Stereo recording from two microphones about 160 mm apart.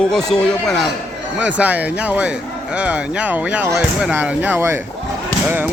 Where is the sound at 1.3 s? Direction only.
10° right (ahead or behind).